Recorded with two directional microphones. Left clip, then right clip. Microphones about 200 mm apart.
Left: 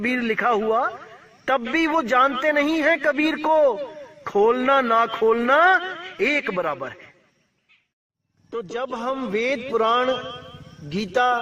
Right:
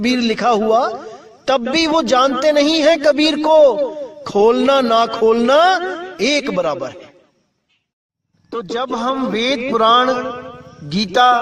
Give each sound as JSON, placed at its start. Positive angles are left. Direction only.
{"t": 0.0, "sound": "a man's voice", "side_deg": -40}
{"t": 8.7, "sound": "a man's voice", "side_deg": -25}
{"t": 10.2, "sound": "a man's voice", "side_deg": -45}
{"t": 10.8, "sound": "a man's voice", "side_deg": -25}